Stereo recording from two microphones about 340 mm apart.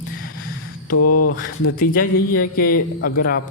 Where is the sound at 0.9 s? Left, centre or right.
Left.